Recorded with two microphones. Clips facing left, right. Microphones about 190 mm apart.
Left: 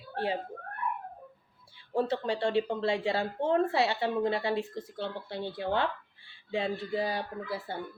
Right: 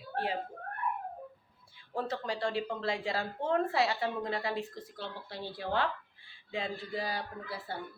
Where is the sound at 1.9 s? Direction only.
30° left (ahead or behind).